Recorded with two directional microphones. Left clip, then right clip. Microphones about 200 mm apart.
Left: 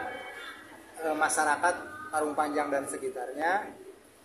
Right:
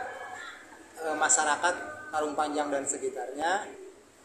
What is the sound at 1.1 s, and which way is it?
Music, 15° left (ahead or behind).